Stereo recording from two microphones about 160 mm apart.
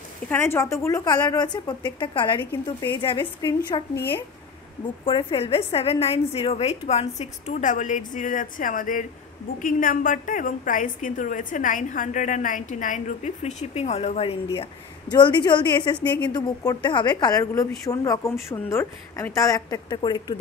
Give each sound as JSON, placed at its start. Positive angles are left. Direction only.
{"t": 0.3, "sound": "a woman's voice", "side_deg": 15}
{"t": 3.9, "sound": "a woman's voice", "side_deg": 15}
{"t": 5.0, "sound": "a woman's voice", "side_deg": 35}
{"t": 14.6, "sound": "a woman's voice", "side_deg": 30}